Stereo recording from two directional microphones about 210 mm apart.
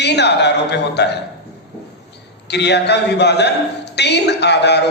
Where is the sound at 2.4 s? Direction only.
55° left (ahead or behind).